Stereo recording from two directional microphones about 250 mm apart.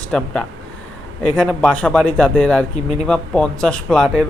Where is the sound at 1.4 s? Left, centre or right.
Centre.